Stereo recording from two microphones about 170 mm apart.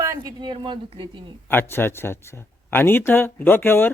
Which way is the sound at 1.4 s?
10° left (ahead or behind).